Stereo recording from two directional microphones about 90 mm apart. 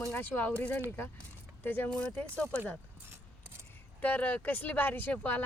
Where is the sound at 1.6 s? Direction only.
20° left (ahead or behind).